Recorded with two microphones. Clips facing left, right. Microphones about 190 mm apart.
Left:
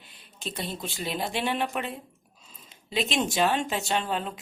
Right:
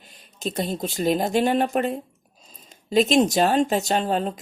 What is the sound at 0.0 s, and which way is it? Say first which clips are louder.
Speech: right 8 dB; 45° right (ahead or behind).